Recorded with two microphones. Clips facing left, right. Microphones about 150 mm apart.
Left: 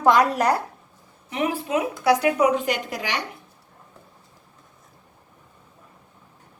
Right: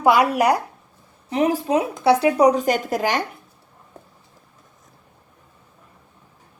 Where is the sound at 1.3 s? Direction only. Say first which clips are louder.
Right 5 dB; 40° right (ahead or behind).